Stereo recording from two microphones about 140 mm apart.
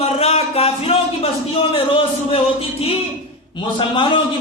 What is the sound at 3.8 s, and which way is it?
Speech, 35° left (ahead or behind).